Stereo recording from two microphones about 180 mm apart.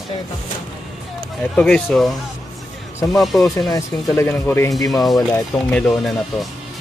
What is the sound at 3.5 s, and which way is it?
Speech, 15° left (ahead or behind).